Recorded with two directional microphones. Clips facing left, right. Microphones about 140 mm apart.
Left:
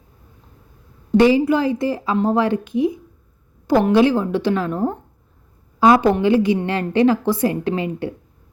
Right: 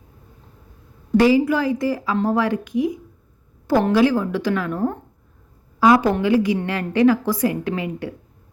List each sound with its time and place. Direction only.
1.1 s a woman's voice: 25° left (ahead or behind)